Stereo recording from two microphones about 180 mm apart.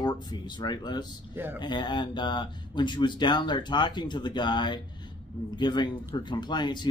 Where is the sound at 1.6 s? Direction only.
25° left (ahead or behind).